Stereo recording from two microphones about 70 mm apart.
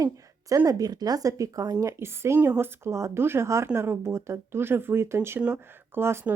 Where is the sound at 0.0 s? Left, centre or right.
Right.